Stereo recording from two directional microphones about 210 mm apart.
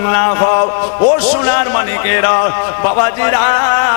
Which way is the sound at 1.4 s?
15° left (ahead or behind).